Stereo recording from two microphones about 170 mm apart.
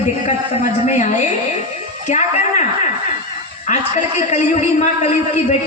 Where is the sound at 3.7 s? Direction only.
45° left (ahead or behind).